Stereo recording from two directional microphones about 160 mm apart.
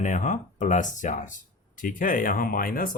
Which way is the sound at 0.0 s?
50° left (ahead or behind).